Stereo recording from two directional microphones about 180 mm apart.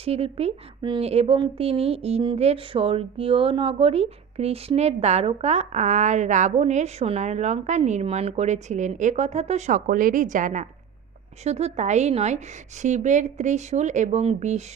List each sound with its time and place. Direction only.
0.0 s speech: 35° right (ahead or behind)